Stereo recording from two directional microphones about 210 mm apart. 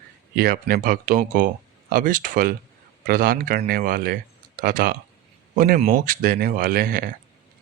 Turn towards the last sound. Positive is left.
turn(degrees=-45)  # may be behind; listen again after turning